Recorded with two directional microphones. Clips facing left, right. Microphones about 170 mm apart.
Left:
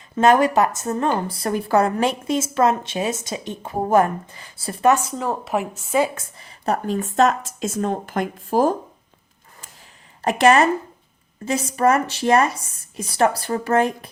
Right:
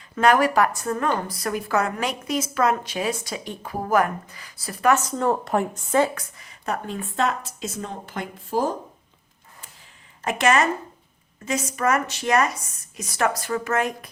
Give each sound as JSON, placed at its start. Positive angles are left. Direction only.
{"t": 0.2, "sound": "a woman's voice", "side_deg": 25}
{"t": 5.1, "sound": "speech", "side_deg": 0}
{"t": 6.1, "sound": "speech", "side_deg": 30}
{"t": 10.2, "sound": "speech", "side_deg": 35}